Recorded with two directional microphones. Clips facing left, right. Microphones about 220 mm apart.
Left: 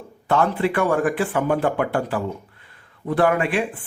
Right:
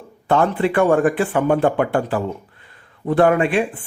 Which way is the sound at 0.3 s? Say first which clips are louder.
Right 3 dB; 30° right (ahead or behind).